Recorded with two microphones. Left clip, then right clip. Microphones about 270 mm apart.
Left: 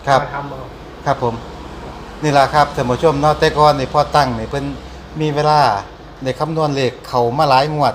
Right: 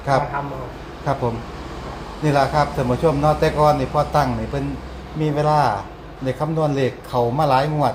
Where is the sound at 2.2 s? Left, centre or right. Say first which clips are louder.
Left 5 dB; left.